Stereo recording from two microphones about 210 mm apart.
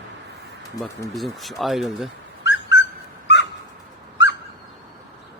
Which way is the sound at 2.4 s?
60° left (ahead or behind).